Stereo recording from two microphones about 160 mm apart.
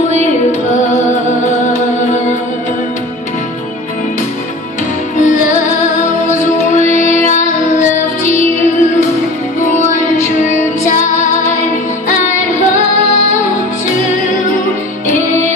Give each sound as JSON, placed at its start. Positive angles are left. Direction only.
{"t": 5.2, "sound": "music", "side_deg": 50}
{"t": 9.8, "sound": "music", "side_deg": 50}